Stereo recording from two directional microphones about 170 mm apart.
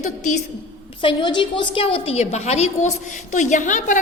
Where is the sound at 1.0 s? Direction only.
30° left (ahead or behind).